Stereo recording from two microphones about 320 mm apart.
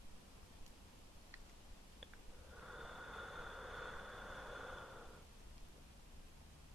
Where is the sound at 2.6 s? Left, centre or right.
Centre.